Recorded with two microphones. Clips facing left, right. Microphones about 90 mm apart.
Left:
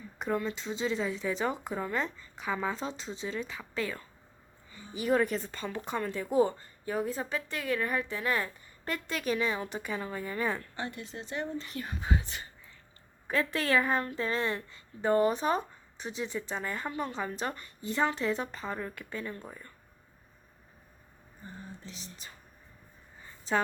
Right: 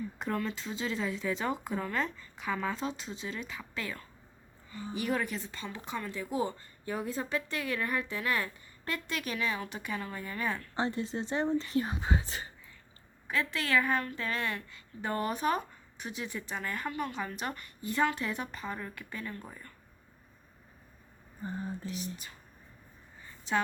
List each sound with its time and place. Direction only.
0.2 s a woman's voice: 15° left (ahead or behind)
5.2 s speech: 40° left (ahead or behind)
6.9 s a woman's voice: 20° left (ahead or behind)
10.8 s speech: 30° right (ahead or behind)
13.2 s a woman's voice: 40° left (ahead or behind); by 19.5 s 20° left (ahead or behind)
21.8 s a woman's voice: 30° left (ahead or behind)